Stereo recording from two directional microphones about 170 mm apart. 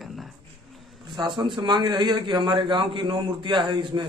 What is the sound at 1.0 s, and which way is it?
A man's voice, 25° right (ahead or behind).